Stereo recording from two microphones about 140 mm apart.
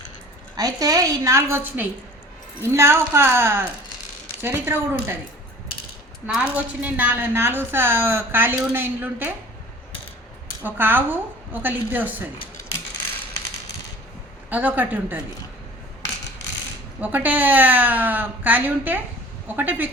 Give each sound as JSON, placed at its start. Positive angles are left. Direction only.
{"t": 0.5, "sound": "a woman's voice", "side_deg": -25}
{"t": 6.2, "sound": "a woman's voice", "side_deg": -10}
{"t": 10.6, "sound": "a woman's voice", "side_deg": -15}
{"t": 14.5, "sound": "a woman's voice", "side_deg": -10}
{"t": 17.0, "sound": "a woman's voice", "side_deg": -10}